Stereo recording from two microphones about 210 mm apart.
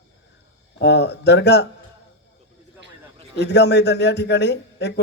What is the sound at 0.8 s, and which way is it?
Speech, 55° left (ahead or behind).